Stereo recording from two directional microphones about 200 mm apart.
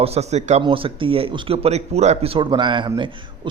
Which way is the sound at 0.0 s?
30° right (ahead or behind).